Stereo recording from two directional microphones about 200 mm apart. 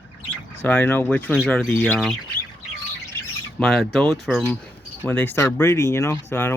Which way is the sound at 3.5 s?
Centre (ahead or behind).